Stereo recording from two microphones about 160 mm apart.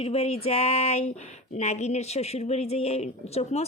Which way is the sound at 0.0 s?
40° left (ahead or behind).